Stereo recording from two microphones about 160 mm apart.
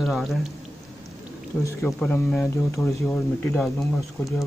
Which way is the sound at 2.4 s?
20° left (ahead or behind).